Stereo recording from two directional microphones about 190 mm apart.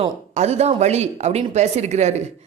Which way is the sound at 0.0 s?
35° right (ahead or behind).